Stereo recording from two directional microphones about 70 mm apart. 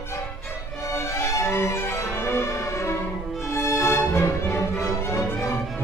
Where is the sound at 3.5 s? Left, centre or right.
Left.